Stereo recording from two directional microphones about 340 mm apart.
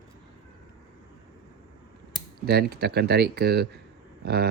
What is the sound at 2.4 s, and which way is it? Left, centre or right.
Speech, right.